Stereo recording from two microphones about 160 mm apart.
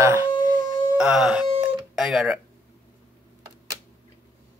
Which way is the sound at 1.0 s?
5° right (ahead or behind).